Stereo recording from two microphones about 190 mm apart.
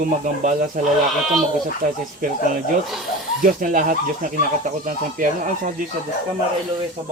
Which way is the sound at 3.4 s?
45° right (ahead or behind).